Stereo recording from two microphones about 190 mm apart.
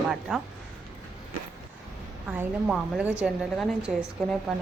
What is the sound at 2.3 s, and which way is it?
A woman's voice, 5° right (ahead or behind).